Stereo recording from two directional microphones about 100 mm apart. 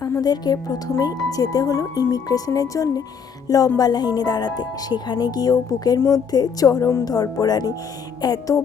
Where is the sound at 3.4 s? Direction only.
35° left (ahead or behind).